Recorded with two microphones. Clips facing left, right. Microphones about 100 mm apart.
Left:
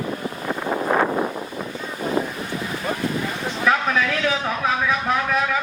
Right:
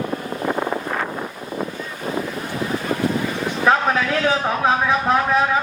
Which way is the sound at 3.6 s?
35° right (ahead or behind).